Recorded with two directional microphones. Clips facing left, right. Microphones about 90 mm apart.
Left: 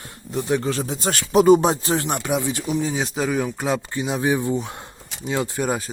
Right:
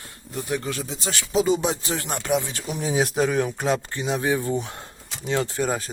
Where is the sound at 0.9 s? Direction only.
50° left (ahead or behind).